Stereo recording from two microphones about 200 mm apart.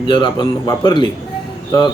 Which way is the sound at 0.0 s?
25° left (ahead or behind).